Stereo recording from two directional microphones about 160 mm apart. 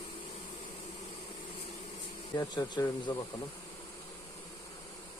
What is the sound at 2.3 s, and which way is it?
Speech, 25° left (ahead or behind).